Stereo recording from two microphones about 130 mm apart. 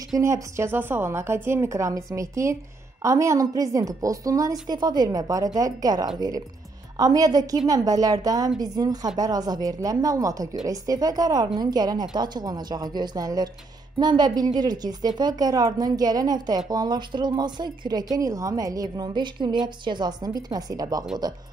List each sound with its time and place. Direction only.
0.1 s a woman's voice: 25° right (ahead or behind)